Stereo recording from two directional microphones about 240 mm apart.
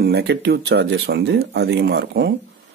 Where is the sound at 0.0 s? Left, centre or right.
Right.